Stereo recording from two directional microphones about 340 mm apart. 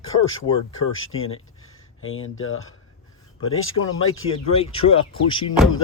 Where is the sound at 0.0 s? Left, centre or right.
Left.